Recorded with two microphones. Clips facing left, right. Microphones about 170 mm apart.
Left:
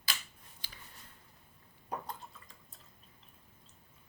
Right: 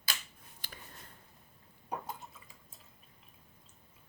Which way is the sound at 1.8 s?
5° right (ahead or behind).